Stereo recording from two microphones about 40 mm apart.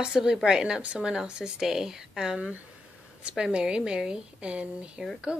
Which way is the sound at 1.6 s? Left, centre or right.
Centre.